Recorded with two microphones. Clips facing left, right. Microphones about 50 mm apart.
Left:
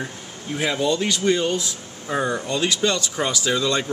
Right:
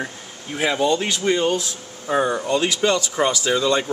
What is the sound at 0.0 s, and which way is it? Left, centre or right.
A man's voice, centre.